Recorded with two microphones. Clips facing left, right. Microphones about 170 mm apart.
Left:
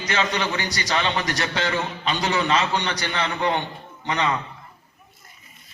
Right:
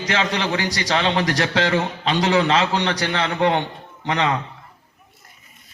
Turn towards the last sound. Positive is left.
turn(degrees=-90)